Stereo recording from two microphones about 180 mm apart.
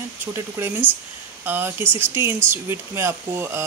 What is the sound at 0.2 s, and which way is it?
Speech, 10° right (ahead or behind).